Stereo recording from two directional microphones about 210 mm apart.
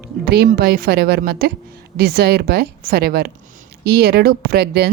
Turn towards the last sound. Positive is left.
turn(degrees=-50)  # may be behind; listen again after turning